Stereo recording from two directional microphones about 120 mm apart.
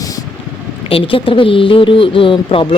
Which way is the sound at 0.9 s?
50° left (ahead or behind).